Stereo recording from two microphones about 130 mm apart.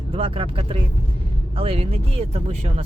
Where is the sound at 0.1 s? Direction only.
45° right (ahead or behind).